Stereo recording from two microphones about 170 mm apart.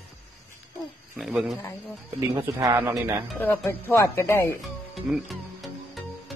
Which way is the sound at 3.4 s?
10° left (ahead or behind).